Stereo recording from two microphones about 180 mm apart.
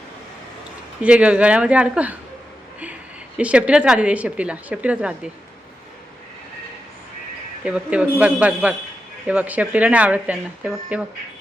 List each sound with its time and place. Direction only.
1.0 s speech: 5° right (ahead or behind)
3.3 s speech: 5° right (ahead or behind)
7.6 s speech: 5° right (ahead or behind)